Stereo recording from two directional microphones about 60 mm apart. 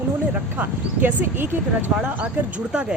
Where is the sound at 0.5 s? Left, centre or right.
Right.